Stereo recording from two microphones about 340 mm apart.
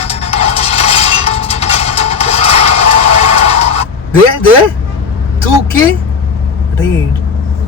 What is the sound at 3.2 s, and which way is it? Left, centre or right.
Music, centre.